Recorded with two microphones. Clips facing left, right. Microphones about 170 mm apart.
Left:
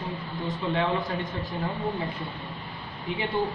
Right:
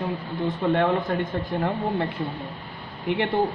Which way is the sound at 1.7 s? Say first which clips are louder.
Right 2 dB; 70° right (ahead or behind).